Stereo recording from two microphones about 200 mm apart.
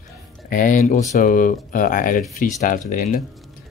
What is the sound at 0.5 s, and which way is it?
Speech, 40° left (ahead or behind).